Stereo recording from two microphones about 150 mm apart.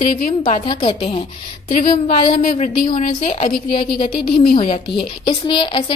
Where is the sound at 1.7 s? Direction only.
65° left (ahead or behind).